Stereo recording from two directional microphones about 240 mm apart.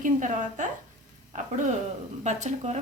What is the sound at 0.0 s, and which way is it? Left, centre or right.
Speech, right.